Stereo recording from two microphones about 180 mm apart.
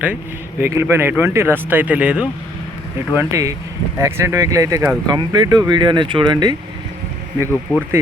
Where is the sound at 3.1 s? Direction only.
15° right (ahead or behind).